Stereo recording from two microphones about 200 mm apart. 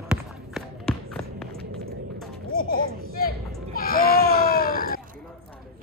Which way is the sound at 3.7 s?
45° left (ahead or behind).